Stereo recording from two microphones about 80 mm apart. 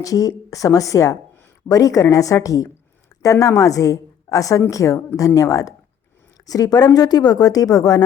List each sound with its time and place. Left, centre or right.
0.0 s speech: left